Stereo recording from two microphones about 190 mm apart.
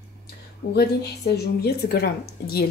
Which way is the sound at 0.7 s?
55° left (ahead or behind).